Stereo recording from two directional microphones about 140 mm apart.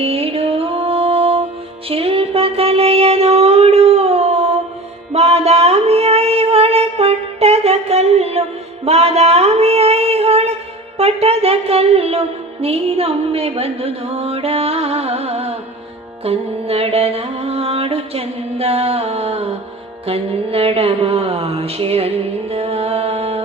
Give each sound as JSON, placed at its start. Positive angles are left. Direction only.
{"t": 0.0, "sound": "music", "side_deg": -45}
{"t": 12.6, "sound": "mantra", "side_deg": -45}
{"t": 16.2, "sound": "music", "side_deg": -45}
{"t": 20.1, "sound": "mantra", "side_deg": -45}